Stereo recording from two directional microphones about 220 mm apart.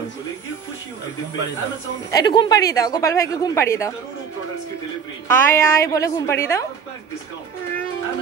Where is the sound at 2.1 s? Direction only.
20° left (ahead or behind).